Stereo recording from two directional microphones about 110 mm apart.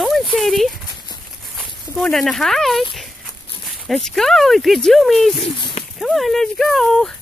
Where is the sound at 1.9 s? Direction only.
Centre (ahead or behind).